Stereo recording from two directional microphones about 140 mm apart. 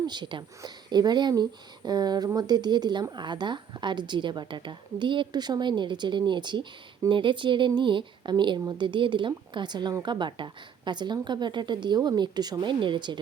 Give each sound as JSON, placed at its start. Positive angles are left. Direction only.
{"t": 0.0, "sound": "speech", "side_deg": -30}